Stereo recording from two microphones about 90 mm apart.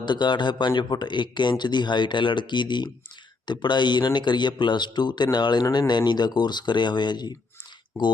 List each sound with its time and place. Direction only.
0.0 s speech: 55° left (ahead or behind)